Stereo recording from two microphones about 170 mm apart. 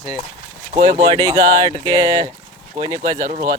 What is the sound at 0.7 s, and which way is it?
Speech, 25° right (ahead or behind).